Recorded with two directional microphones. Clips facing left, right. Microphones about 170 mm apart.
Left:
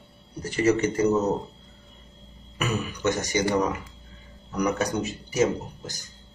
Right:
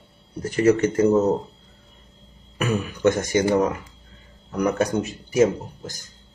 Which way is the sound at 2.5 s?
50° right (ahead or behind).